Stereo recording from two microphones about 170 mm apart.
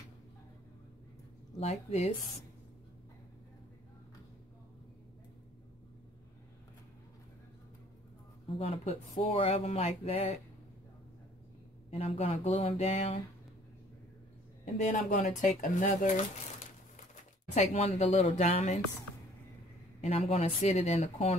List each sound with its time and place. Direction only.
1.6 s speech: 40° left (ahead or behind)
8.5 s speech: 35° left (ahead or behind)
11.9 s speech: 35° left (ahead or behind)
14.6 s a man's voice: 45° left (ahead or behind)
17.6 s speech: 40° left (ahead or behind)
20.0 s speech: 35° left (ahead or behind)